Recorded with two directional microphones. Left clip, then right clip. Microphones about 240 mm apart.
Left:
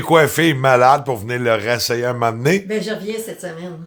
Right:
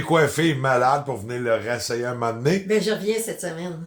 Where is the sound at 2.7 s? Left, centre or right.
Centre.